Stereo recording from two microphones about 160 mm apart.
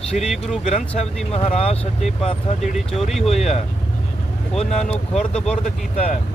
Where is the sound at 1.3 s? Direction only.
40° left (ahead or behind).